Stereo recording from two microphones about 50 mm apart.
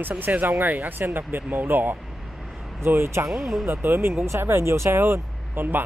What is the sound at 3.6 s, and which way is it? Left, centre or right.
Speech, right.